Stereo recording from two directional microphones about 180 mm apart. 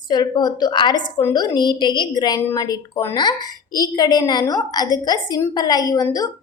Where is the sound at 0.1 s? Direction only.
20° left (ahead or behind).